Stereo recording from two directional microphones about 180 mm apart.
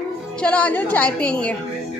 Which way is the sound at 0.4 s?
10° left (ahead or behind).